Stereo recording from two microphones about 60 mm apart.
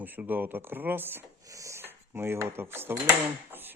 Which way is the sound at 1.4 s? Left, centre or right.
Right.